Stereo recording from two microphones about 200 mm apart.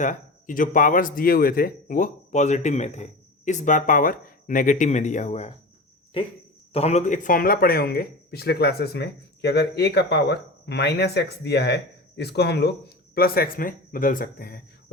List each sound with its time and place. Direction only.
0.0 s speech: 40° left (ahead or behind)
6.7 s speech: 35° left (ahead or behind); by 14.6 s 50° left (ahead or behind)